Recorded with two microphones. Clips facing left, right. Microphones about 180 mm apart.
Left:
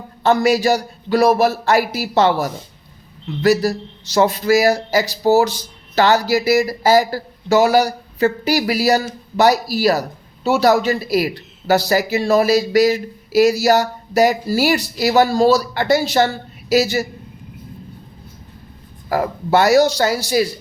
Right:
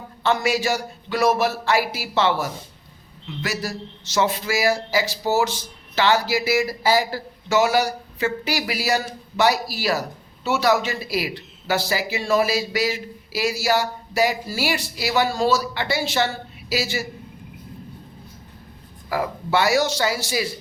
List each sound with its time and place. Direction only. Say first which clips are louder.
0.2 s a man's voice: left 7 dB; 40° left (ahead or behind)
19.0 s a man's voice: left 5 dB; 45° left (ahead or behind)